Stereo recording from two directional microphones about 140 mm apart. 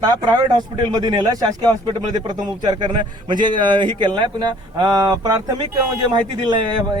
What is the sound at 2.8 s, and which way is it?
A man's voice, 35° right (ahead or behind).